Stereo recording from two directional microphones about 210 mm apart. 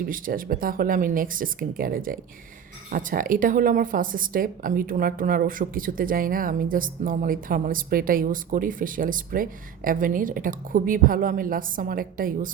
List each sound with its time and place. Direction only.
0.0 s speech: 40° right (ahead or behind)